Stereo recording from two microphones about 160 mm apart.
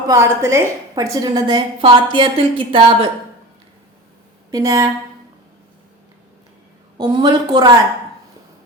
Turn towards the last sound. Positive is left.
turn(degrees=-25)  # may be behind; listen again after turning